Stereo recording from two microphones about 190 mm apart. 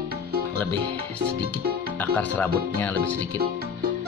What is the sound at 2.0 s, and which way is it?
Speech, 10° left (ahead or behind).